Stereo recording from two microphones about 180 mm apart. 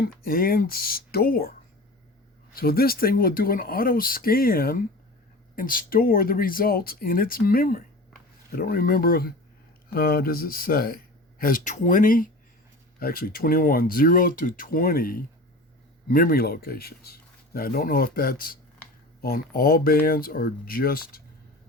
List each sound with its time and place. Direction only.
0.0 s speech: 55° left (ahead or behind)
2.6 s speech: 55° left (ahead or behind)